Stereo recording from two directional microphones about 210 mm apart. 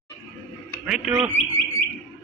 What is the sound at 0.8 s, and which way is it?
Bird, 5° right (ahead or behind).